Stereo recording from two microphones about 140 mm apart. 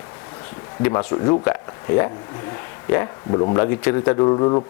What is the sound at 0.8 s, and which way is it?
Speech, 20° left (ahead or behind).